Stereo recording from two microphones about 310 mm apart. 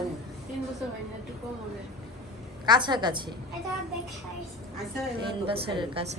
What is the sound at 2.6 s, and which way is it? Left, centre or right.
Speech, centre.